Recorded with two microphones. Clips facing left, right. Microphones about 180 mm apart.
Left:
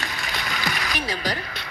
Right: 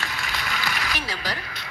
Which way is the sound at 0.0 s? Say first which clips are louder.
Left 1 dB; 15° left (ahead or behind).